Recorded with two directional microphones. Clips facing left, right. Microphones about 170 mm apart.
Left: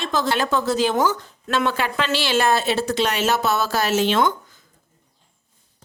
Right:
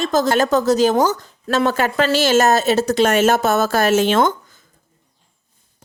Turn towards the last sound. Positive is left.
turn(degrees=-45)  # may be behind; listen again after turning